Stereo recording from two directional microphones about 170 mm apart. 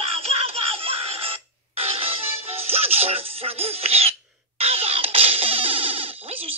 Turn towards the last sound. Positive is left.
turn(degrees=-35)  # may be behind; listen again after turning